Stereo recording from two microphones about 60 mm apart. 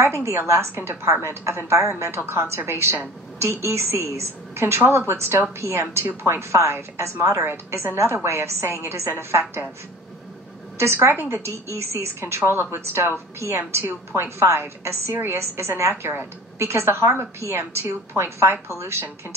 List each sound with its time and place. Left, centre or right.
0.4 s a woman's voice: right
10.8 s a woman's voice: right